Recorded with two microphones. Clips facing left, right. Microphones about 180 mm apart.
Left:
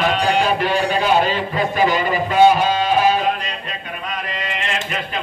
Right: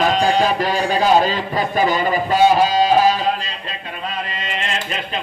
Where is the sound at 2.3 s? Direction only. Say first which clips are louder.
Left 1 dB; 35° right (ahead or behind).